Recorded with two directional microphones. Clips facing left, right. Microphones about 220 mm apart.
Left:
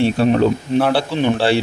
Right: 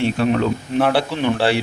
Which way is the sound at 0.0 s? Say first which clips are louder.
Left 3 dB; 35° left (ahead or behind).